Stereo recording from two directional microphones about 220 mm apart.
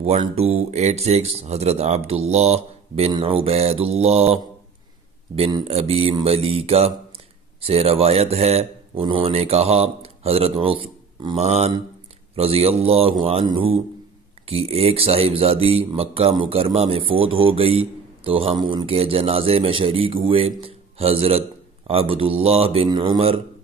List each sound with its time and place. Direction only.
0.0 s speech: 25° right (ahead or behind)